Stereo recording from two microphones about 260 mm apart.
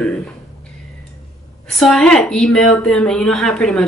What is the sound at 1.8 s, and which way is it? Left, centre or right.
A woman's voice, centre.